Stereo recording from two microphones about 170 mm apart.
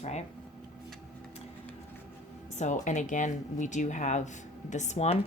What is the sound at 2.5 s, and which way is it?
Speech, 45° left (ahead or behind).